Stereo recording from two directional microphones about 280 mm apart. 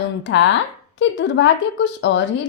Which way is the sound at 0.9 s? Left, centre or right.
Left.